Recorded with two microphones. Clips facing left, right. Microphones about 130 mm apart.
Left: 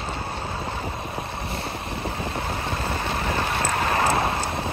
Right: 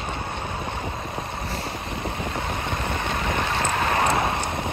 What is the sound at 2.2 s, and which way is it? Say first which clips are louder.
Vehicle: even; 30° left (ahead or behind).